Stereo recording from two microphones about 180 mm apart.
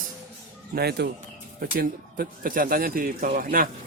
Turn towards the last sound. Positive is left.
turn(degrees=-50)  # may be behind; listen again after turning